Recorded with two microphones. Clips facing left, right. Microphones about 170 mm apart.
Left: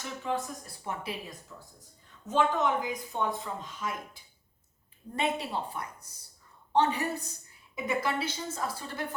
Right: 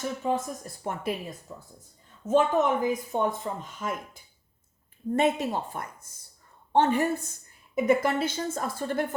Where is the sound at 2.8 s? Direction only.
50° right (ahead or behind).